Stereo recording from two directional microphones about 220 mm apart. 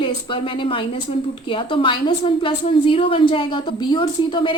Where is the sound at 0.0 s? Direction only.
20° left (ahead or behind).